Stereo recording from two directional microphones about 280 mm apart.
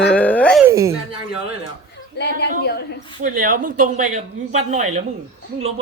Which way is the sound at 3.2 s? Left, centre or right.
Right.